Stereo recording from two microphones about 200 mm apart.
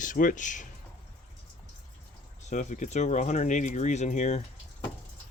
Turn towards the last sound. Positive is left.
turn(degrees=35)  # may be behind; listen again after turning